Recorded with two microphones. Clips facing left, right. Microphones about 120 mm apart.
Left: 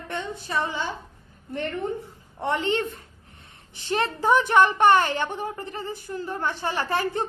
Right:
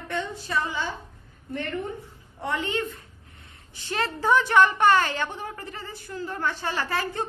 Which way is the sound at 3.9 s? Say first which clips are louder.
Left 2 dB; 20° left (ahead or behind).